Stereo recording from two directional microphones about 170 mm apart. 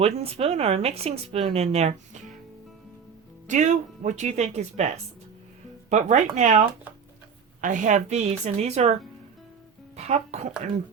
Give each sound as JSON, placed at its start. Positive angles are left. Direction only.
{"t": 0.0, "sound": "speech", "side_deg": -35}
{"t": 3.4, "sound": "speech", "side_deg": -45}
{"t": 5.9, "sound": "speech", "side_deg": -45}
{"t": 10.0, "sound": "speech", "side_deg": -40}